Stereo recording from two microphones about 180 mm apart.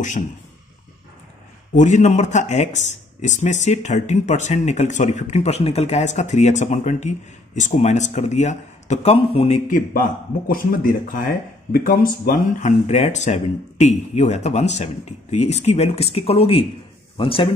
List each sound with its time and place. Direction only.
1.8 s speech: 40° left (ahead or behind)